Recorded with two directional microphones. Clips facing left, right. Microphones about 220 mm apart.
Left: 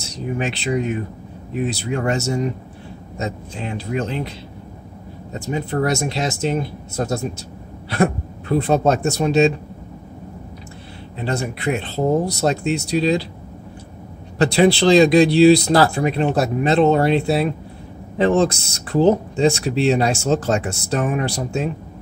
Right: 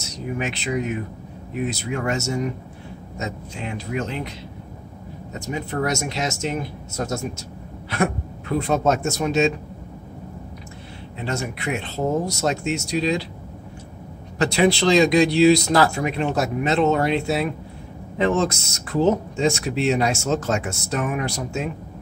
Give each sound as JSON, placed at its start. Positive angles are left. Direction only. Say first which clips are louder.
{"t": 0.0, "sound": "speech", "louder": "left 3 dB", "side_deg": 30}
{"t": 5.3, "sound": "speech", "louder": "left 4 dB", "side_deg": 30}
{"t": 11.1, "sound": "speech", "louder": "left 4 dB", "side_deg": 35}
{"t": 14.4, "sound": "speech", "louder": "left 4 dB", "side_deg": 35}